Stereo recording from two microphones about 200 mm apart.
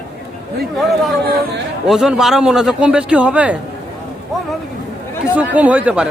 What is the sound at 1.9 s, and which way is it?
A man's voice, 5° right (ahead or behind).